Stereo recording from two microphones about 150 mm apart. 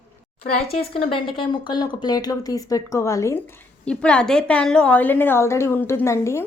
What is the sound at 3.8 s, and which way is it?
A woman's voice, 5° left (ahead or behind).